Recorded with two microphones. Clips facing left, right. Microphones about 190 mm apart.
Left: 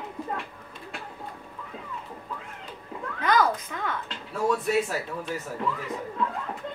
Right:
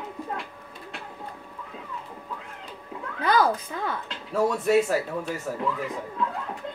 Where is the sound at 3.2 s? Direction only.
30° right (ahead or behind).